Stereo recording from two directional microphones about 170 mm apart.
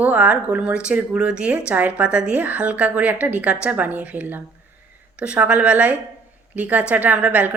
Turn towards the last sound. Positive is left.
turn(degrees=-10)  # may be behind; listen again after turning